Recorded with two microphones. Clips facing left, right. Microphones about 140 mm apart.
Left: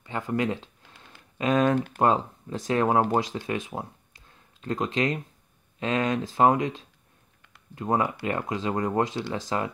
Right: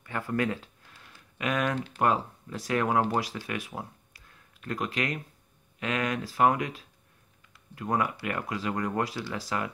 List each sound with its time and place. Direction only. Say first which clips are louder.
0.0 s speech: left 2 dB; 20° left (ahead or behind)